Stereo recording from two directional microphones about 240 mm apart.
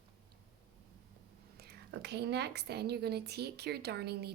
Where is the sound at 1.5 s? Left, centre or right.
Right.